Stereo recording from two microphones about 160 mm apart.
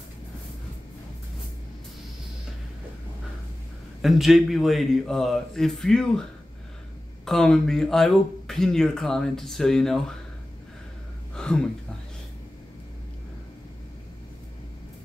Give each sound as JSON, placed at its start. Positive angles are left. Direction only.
{"t": 4.0, "sound": "speech", "side_deg": 0}
{"t": 7.2, "sound": "speech", "side_deg": 5}
{"t": 11.3, "sound": "a sound", "side_deg": 5}